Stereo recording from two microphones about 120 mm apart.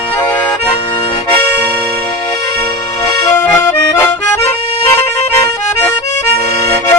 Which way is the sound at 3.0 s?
25° left (ahead or behind).